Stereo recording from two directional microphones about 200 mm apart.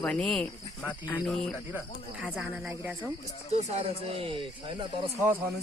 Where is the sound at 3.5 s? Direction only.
35° right (ahead or behind).